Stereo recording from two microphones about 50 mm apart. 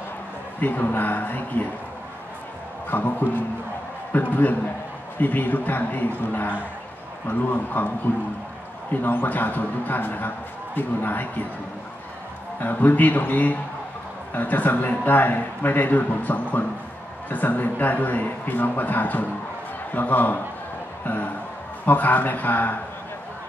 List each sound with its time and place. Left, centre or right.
0.6 s a man's voice: left
2.9 s a man's voice: left
9.0 s a man's voice: left
12.5 s a man's voice: left